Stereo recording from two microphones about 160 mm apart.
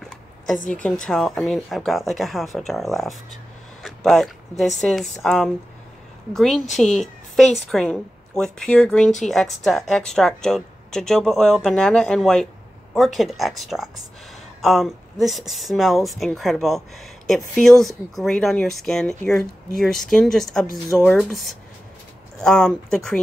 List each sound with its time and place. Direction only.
0.6 s a woman's voice: 55° left (ahead or behind)
1.0 s a woman's voice: centre (ahead or behind)